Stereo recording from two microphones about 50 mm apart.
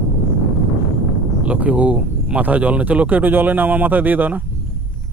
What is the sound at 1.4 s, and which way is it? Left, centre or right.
Speech, right.